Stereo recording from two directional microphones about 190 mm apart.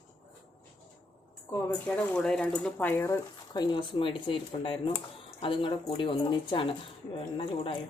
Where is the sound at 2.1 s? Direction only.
5° left (ahead or behind); by 7.8 s 25° left (ahead or behind).